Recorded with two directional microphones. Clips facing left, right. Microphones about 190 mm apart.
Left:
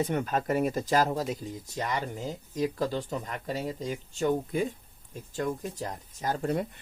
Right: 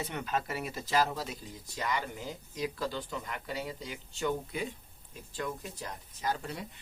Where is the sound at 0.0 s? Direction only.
45° left (ahead or behind).